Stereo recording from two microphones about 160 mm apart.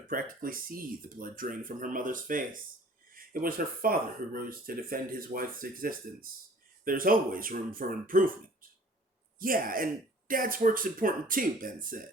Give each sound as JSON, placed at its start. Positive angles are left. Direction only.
{"t": 0.1, "sound": "speech", "side_deg": -60}
{"t": 3.4, "sound": "speech", "side_deg": -65}
{"t": 9.4, "sound": "speech", "side_deg": -60}